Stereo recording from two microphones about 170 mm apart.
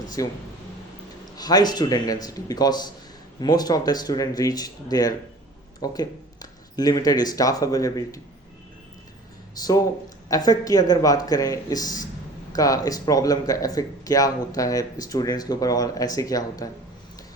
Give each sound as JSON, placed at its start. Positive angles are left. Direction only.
{"t": 0.2, "sound": "speech", "side_deg": 20}
{"t": 1.4, "sound": "speech", "side_deg": 20}
{"t": 9.6, "sound": "speech", "side_deg": 20}